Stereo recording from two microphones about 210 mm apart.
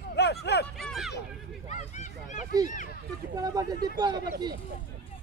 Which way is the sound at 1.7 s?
35° left (ahead or behind).